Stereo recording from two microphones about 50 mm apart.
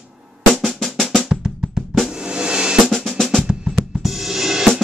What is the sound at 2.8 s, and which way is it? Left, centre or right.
Drum, centre.